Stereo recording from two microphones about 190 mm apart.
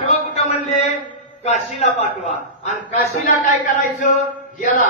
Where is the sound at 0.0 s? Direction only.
30° left (ahead or behind).